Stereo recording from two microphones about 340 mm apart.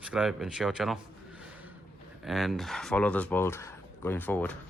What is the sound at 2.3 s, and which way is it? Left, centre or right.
Speech, centre.